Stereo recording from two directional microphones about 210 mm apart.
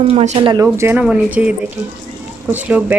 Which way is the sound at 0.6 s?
10° right (ahead or behind).